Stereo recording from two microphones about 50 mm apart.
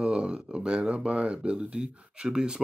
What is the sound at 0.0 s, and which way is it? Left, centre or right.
Speech, centre.